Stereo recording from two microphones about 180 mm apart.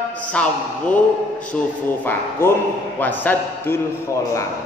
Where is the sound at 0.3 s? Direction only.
5° left (ahead or behind).